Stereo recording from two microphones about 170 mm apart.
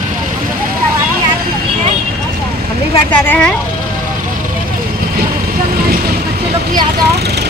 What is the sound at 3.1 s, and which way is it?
Speech, 10° left (ahead or behind).